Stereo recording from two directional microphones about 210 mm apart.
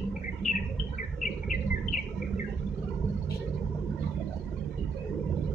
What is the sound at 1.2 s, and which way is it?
Bird, 40° left (ahead or behind).